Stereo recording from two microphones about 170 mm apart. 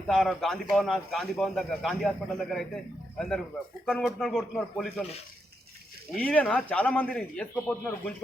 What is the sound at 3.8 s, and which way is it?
A man's voice, 5° left (ahead or behind).